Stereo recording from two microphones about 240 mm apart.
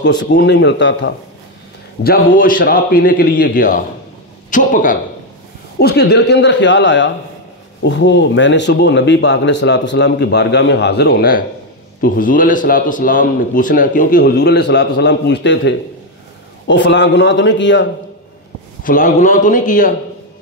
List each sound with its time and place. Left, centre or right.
0.0 s speech: left
2.0 s a man's voice: left
18.8 s a man's voice: left